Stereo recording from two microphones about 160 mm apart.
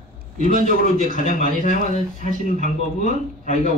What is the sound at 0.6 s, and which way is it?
A man's voice, 50° left (ahead or behind).